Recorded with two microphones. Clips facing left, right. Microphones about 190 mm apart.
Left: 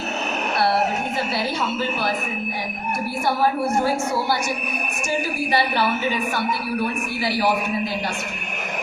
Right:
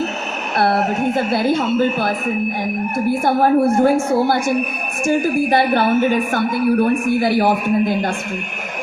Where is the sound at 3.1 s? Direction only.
50° right (ahead or behind).